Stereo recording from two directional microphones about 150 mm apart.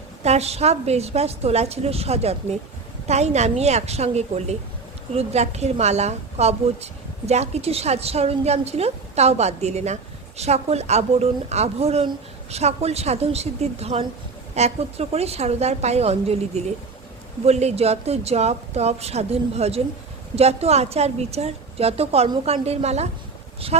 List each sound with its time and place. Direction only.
0.2 s a woman's voice: 45° right (ahead or behind)